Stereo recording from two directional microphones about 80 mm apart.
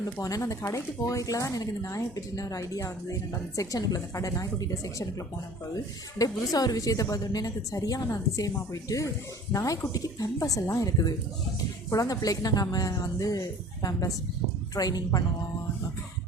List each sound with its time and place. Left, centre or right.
0.0 s speech: left